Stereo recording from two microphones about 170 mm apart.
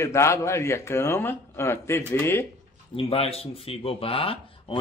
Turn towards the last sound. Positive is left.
turn(degrees=35)  # may be behind; listen again after turning